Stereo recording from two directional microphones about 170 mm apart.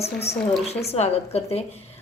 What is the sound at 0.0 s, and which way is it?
A woman's voice, 35° left (ahead or behind).